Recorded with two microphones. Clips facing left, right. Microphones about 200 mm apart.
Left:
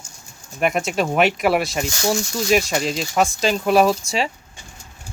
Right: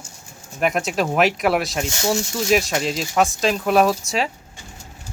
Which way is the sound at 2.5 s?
Centre (ahead or behind).